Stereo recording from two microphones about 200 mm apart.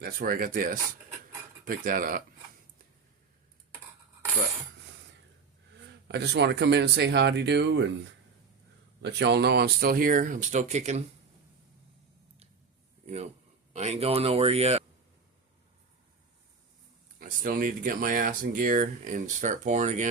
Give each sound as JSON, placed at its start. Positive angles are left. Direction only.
{"t": 0.0, "sound": "speech", "side_deg": -45}
{"t": 6.1, "sound": "speech", "side_deg": -55}
{"t": 9.0, "sound": "speech", "side_deg": -60}
{"t": 13.7, "sound": "speech", "side_deg": -35}
{"t": 17.2, "sound": "speech", "side_deg": -45}